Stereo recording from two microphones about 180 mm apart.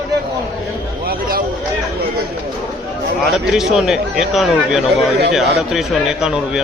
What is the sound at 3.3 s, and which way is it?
A man's voice, centre (ahead or behind).